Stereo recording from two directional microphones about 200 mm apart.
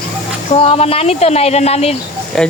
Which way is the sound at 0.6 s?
30° left (ahead or behind).